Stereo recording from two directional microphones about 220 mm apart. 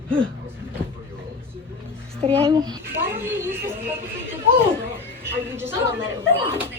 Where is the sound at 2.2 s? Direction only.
20° right (ahead or behind).